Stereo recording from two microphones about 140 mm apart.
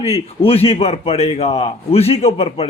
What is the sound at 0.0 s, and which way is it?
A man's voice, 45° left (ahead or behind).